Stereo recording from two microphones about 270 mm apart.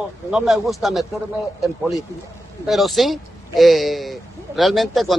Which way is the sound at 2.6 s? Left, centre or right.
Centre.